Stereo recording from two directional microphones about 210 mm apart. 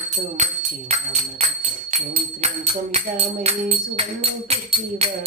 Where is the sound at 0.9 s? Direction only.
30° right (ahead or behind).